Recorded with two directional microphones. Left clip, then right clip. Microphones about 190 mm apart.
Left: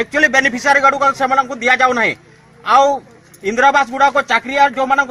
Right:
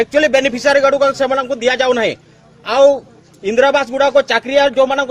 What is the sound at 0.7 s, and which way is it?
Speech, 35° right (ahead or behind).